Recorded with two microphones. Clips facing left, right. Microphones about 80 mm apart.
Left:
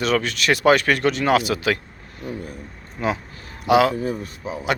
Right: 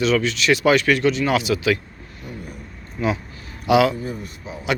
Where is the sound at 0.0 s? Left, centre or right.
Left.